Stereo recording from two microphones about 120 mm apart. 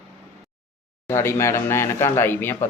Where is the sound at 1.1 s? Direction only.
20° left (ahead or behind).